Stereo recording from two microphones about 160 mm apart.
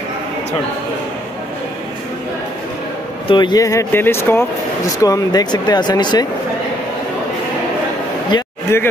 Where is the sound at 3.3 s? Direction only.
30° left (ahead or behind).